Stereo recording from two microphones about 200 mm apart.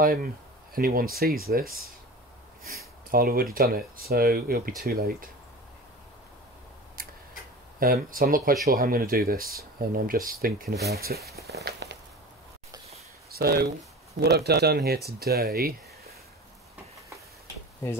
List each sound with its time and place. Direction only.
0.0 s speech: 45° right (ahead or behind)
2.6 s a sound: 50° right (ahead or behind)
3.5 s speech: 45° right (ahead or behind)
7.8 s speech: 45° right (ahead or behind)
11.2 s a sound: 50° right (ahead or behind)
13.3 s speech: 50° right (ahead or behind)